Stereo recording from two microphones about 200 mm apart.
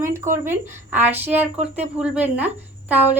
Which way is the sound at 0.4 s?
10° right (ahead or behind).